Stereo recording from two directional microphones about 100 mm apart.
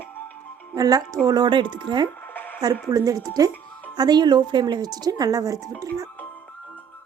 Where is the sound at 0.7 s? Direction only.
40° right (ahead or behind).